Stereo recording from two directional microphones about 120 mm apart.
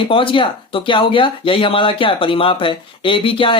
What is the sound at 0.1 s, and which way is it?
Speech, 45° left (ahead or behind).